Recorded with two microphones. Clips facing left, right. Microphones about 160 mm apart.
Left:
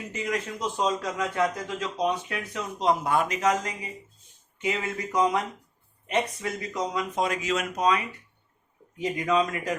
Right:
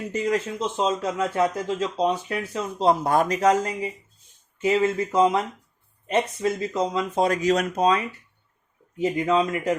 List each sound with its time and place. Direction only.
0.1 s a man's voice: 30° right (ahead or behind)
6.4 s a man's voice: 25° right (ahead or behind)
7.3 s a man's voice: 40° right (ahead or behind)